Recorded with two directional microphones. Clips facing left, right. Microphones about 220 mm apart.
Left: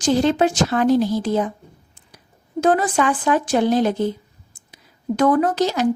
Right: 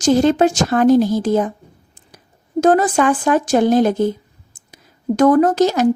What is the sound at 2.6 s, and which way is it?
A woman's voice, 45° right (ahead or behind).